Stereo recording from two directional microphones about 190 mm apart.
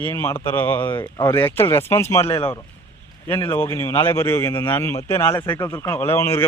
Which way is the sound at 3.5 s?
15° left (ahead or behind).